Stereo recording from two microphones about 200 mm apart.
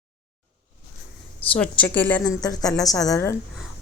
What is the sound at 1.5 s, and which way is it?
Speech, 5° left (ahead or behind).